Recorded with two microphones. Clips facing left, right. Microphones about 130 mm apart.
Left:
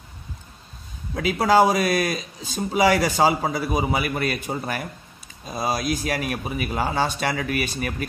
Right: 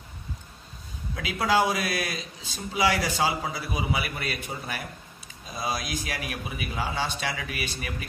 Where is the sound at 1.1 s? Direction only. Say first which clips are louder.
Left 7 dB; 45° left (ahead or behind).